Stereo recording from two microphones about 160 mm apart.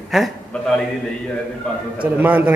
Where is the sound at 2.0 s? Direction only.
10° right (ahead or behind).